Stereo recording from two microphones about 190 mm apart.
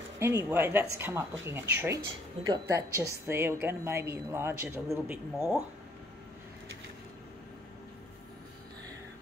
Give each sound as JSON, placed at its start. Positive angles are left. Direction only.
{"t": 0.2, "sound": "a woman's voice", "side_deg": -15}